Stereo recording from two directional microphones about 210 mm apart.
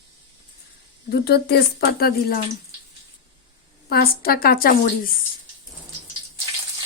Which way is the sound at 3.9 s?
45° left (ahead or behind).